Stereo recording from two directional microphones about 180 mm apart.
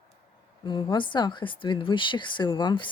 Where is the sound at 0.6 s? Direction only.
25° left (ahead or behind).